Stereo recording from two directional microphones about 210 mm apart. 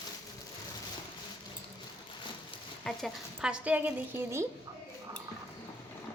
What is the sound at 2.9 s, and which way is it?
Speech, centre (ahead or behind).